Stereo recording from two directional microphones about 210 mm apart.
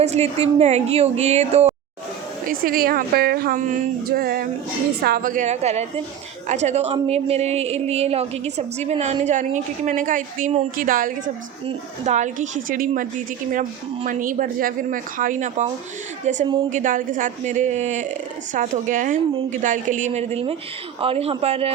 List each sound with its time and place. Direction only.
0.0 s a woman's voice: 30° right (ahead or behind)
2.5 s a woman's voice: 45° right (ahead or behind)